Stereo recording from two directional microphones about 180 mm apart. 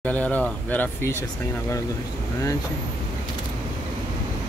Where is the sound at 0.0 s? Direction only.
10° left (ahead or behind).